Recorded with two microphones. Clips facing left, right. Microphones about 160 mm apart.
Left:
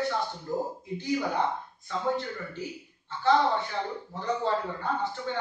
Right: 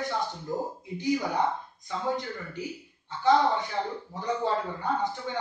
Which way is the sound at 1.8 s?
15° right (ahead or behind).